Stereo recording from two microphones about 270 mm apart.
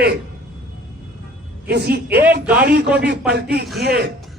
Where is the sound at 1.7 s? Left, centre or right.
Right.